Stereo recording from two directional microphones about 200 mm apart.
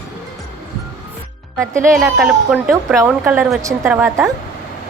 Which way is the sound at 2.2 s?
5° right (ahead or behind).